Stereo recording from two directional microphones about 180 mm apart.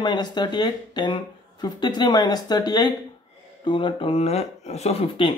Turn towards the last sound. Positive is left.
turn(degrees=30)  # may be behind; listen again after turning